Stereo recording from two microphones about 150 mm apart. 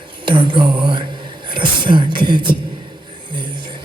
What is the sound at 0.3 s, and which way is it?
Speech, 35° right (ahead or behind).